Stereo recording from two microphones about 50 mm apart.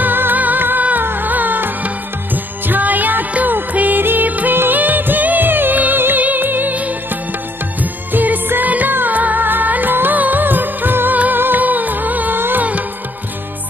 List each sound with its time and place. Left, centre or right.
0.0 s music: right
8.1 s music: right